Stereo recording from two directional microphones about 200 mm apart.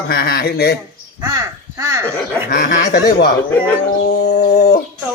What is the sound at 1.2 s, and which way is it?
Speech, 15° right (ahead or behind).